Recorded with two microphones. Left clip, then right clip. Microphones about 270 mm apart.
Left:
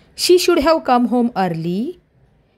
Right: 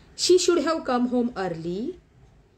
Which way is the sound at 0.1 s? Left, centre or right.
Left.